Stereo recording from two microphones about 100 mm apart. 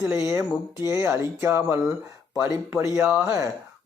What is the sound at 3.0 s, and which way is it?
Speech, 20° right (ahead or behind).